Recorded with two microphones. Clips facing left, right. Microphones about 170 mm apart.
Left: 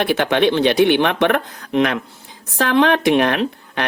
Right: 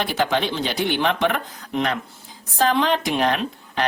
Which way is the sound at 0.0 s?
65° left (ahead or behind).